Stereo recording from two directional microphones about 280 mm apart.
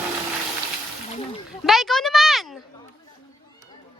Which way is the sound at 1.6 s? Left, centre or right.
Centre.